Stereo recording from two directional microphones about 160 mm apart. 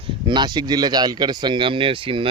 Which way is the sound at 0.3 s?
30° right (ahead or behind).